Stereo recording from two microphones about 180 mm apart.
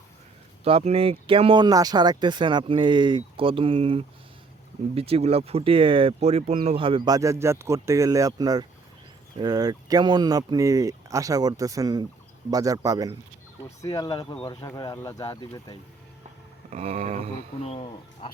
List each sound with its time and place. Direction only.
0.6 s speech: 35° right (ahead or behind); by 13.1 s 20° right (ahead or behind)
13.8 s speech: 20° left (ahead or behind)
16.6 s a sound: 35° right (ahead or behind)
17.6 s speech: 30° left (ahead or behind)